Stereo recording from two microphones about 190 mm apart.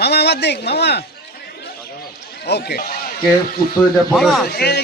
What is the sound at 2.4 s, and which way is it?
Speech, 60° left (ahead or behind).